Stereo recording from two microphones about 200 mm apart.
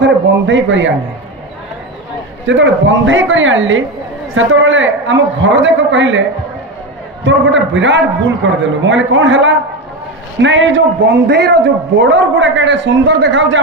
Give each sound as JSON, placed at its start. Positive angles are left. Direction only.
{"t": 0.0, "sound": "speech", "side_deg": -65}
{"t": 2.4, "sound": "a man's voice", "side_deg": -70}
{"t": 7.2, "sound": "a man's voice", "side_deg": -70}